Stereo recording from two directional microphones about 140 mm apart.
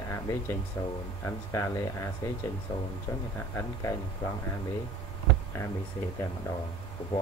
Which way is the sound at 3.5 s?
20° left (ahead or behind).